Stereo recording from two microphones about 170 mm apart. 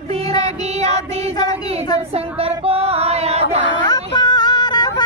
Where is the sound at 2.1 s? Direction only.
35° right (ahead or behind).